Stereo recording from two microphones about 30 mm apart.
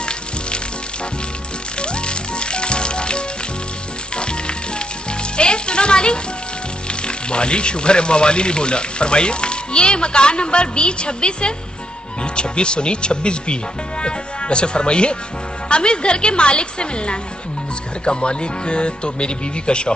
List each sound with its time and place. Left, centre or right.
1.8 s music: left
7.0 s speech: left